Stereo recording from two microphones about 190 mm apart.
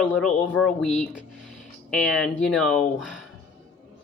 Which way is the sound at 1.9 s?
Centre (ahead or behind).